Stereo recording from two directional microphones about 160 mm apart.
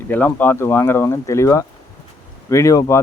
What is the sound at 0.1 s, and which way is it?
Speech, 10° left (ahead or behind).